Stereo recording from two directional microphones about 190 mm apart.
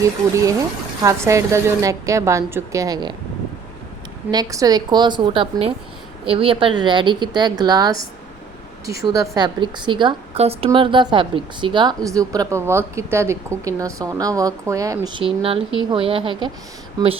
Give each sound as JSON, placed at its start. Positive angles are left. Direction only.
{"t": 0.0, "sound": "speech", "side_deg": -15}
{"t": 4.3, "sound": "a woman's voice", "side_deg": -20}